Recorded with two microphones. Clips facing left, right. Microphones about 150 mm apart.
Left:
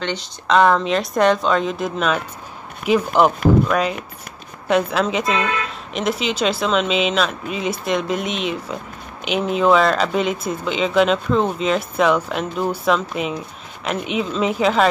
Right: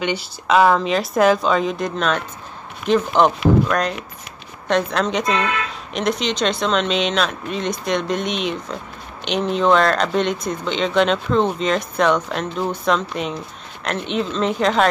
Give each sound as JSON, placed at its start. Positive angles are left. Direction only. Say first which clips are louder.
{"t": 0.0, "sound": "speech", "louder": "right 2 dB", "side_deg": -10}